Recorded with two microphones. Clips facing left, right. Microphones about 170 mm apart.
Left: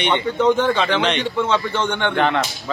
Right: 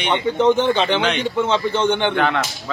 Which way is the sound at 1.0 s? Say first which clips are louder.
Even; centre (ahead or behind).